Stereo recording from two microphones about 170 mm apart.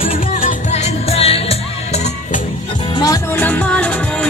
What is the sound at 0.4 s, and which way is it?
Music, 45° left (ahead or behind).